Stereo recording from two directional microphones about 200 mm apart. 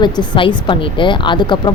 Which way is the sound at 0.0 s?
25° left (ahead or behind).